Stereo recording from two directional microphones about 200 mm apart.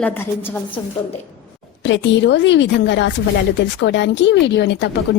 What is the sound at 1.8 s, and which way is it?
A woman's voice, 65° left (ahead or behind).